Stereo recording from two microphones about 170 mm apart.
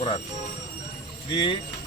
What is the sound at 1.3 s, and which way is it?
Speech, 30° left (ahead or behind).